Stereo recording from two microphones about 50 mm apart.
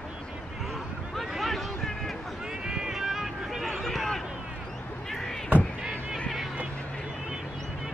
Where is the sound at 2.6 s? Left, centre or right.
Centre.